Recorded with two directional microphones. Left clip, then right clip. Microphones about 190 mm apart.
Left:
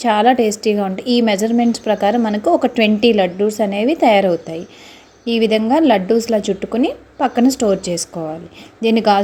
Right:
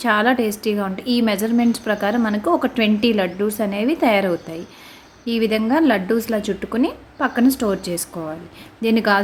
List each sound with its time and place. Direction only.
0.0 s a woman's voice: 10° left (ahead or behind)